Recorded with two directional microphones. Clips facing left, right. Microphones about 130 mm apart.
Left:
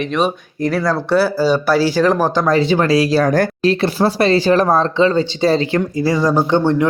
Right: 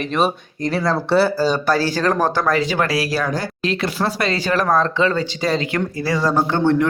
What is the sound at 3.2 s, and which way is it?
Speech, 55° left (ahead or behind).